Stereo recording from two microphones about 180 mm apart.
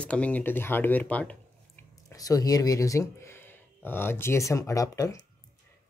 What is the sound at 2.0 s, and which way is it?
Speech, 20° left (ahead or behind).